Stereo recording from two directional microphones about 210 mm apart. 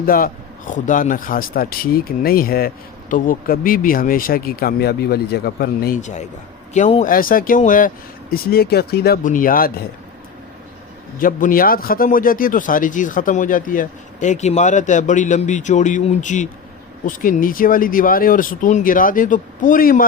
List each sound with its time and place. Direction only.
0.0 s a man's voice: 45° left (ahead or behind)
11.2 s speech: 40° left (ahead or behind)